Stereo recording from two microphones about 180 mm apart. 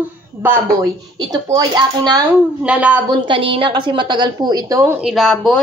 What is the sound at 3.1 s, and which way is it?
A woman's voice, 25° right (ahead or behind).